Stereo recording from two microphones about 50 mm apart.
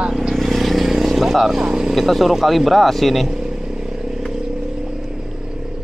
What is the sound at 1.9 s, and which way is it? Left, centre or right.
Speech, centre.